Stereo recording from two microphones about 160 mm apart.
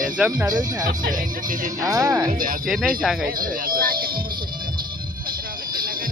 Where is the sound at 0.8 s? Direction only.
60° right (ahead or behind).